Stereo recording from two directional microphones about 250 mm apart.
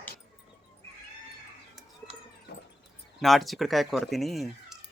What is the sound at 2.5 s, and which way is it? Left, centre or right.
Cat, left.